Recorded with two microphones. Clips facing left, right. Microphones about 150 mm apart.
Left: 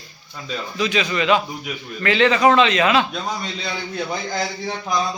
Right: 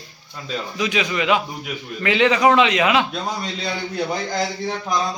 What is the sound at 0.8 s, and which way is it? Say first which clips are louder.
A man's voice: left 1 dB; 15° right (ahead or behind).